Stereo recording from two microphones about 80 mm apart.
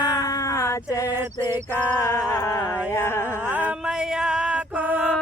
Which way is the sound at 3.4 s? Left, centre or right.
Right.